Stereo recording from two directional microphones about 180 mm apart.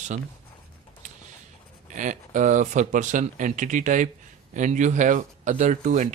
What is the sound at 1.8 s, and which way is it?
Speech, 45° right (ahead or behind).